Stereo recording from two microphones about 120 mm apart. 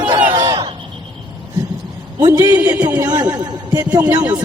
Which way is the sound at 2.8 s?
30° right (ahead or behind).